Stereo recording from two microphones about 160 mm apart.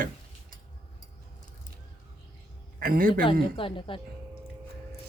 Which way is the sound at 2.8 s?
60° right (ahead or behind).